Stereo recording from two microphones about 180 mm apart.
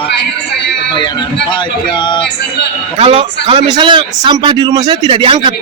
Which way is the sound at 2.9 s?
30° right (ahead or behind).